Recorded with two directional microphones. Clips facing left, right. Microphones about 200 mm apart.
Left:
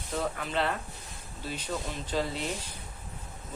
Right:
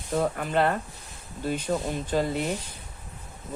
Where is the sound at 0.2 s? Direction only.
50° right (ahead or behind).